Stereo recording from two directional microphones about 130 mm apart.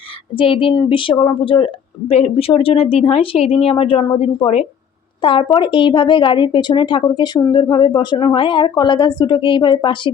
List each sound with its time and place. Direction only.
0.3 s a woman's voice: 40° left (ahead or behind)